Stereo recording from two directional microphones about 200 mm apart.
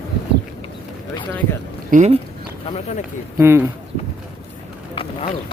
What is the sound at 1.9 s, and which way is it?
Speech, 35° right (ahead or behind).